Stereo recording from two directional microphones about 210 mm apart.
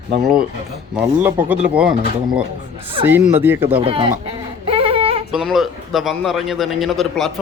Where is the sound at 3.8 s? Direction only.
25° right (ahead or behind).